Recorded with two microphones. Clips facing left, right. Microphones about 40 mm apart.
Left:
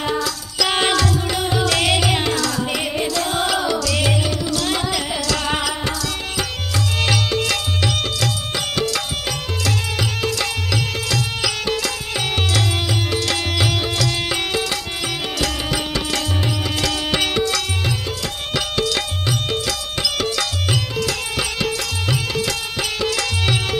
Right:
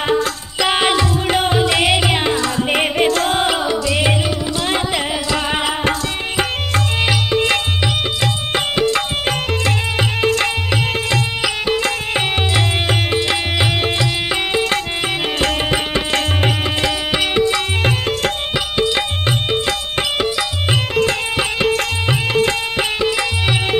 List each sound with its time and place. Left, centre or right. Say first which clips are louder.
0.0 s music: right 5 dB; right
0.7 s music: right 3 dB; centre
1.1 s music: right 5 dB; right
1.6 s music: right 3 dB; right
5.9 s music: right 5 dB; right
7.1 s music: right 4 dB; right
15.3 s music: right 5 dB; right
16.8 s music: right 1 dB; right
17.8 s music: right 7 dB; right
18.5 s music: left 1 dB; right
19.2 s music: right 4 dB; right